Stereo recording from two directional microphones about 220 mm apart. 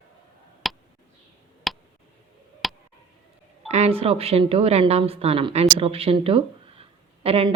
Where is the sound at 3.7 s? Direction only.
30° right (ahead or behind).